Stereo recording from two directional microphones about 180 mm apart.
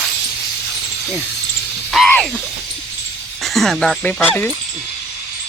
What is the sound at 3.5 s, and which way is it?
Speech, centre (ahead or behind).